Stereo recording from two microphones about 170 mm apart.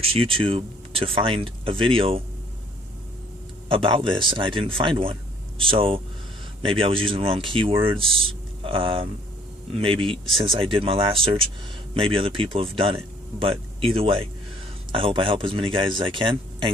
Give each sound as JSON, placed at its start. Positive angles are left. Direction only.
{"t": 0.0, "sound": "speech", "side_deg": -35}
{"t": 3.6, "sound": "speech", "side_deg": -30}